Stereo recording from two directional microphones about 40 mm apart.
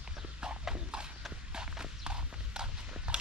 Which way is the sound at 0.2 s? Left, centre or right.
Centre.